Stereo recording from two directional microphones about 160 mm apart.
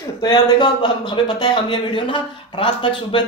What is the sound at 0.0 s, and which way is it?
Speech, 25° left (ahead or behind).